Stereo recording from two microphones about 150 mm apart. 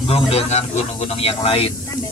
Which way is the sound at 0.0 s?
40° left (ahead or behind).